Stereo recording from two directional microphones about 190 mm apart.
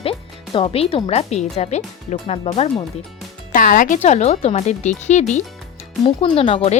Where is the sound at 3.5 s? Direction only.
45° left (ahead or behind).